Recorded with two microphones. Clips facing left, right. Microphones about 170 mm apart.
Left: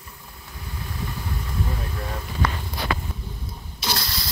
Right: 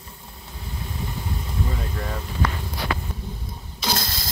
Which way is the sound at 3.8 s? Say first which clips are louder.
Right 2 dB; 50° right (ahead or behind).